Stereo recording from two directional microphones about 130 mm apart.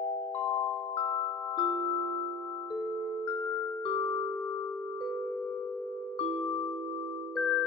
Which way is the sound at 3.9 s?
40° left (ahead or behind).